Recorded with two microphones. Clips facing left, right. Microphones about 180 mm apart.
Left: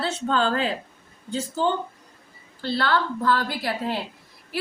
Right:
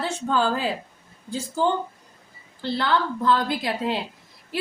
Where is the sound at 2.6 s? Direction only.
15° right (ahead or behind).